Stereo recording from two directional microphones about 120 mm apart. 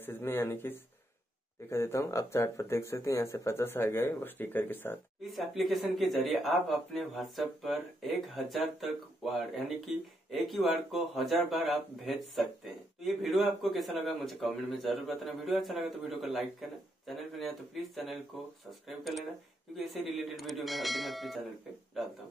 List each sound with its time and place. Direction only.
0.0 s speech: 20° left (ahead or behind)
5.2 s speech: centre (ahead or behind)